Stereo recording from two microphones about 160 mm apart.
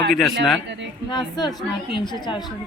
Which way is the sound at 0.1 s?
Centre (ahead or behind).